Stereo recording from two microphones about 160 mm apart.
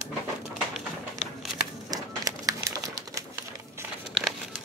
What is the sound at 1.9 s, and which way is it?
Bird, 20° right (ahead or behind).